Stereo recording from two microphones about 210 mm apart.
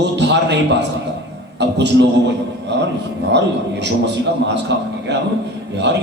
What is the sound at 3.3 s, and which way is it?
Speech, 55° right (ahead or behind).